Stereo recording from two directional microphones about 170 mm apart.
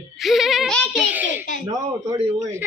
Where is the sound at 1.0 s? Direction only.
10° right (ahead or behind).